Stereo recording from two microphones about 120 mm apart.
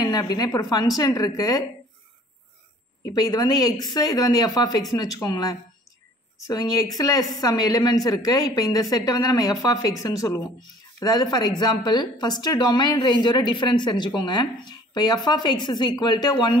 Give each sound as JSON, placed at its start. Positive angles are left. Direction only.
{"t": 0.0, "sound": "speech", "side_deg": 35}
{"t": 3.2, "sound": "speech", "side_deg": 30}